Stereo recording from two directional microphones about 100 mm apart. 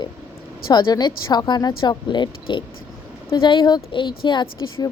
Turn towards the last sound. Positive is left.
turn(degrees=50)  # may be behind; listen again after turning